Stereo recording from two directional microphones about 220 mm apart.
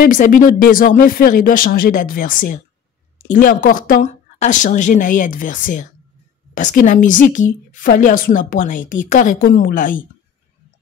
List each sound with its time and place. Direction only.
0.0 s a woman's voice: 40° left (ahead or behind)